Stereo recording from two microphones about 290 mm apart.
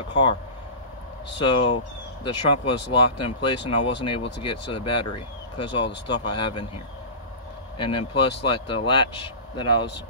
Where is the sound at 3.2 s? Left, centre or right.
Centre.